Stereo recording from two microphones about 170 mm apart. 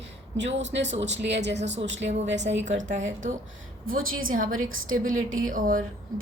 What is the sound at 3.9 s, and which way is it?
A woman's voice, 55° right (ahead or behind).